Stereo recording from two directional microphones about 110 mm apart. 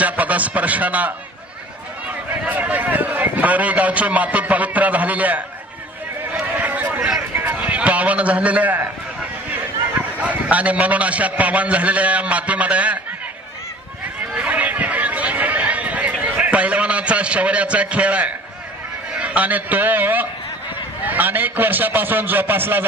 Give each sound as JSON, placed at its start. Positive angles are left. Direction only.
{"t": 0.0, "sound": "a sound", "side_deg": -15}
{"t": 2.4, "sound": "a man's voice", "side_deg": -15}
{"t": 6.3, "sound": "a sound", "side_deg": -15}
{"t": 10.1, "sound": "a man's voice", "side_deg": -15}
{"t": 14.3, "sound": "chatter", "side_deg": -10}
{"t": 19.1, "sound": "a man's voice", "side_deg": -10}